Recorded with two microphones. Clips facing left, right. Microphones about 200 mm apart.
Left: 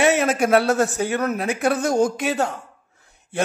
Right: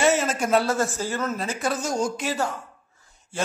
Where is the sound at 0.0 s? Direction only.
65° left (ahead or behind).